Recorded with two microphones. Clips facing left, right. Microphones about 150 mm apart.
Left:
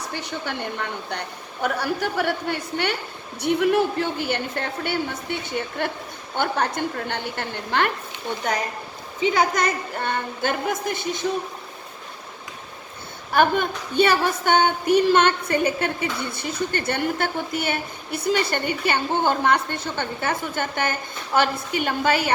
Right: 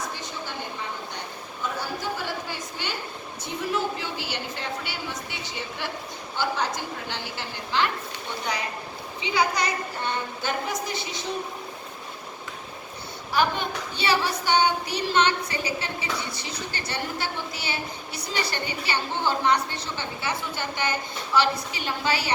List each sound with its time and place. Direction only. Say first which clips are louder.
0.1 s a woman's voice: left 5 dB; 65° left (ahead or behind)
9.2 s a woman's voice: left 5 dB; 50° left (ahead or behind)
13.3 s a woman's voice: left 5 dB; 50° left (ahead or behind)